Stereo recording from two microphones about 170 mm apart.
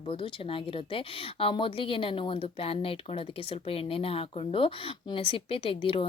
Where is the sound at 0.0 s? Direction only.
30° left (ahead or behind).